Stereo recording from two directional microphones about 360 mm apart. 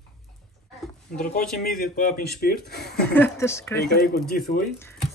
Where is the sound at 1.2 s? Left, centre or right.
Left.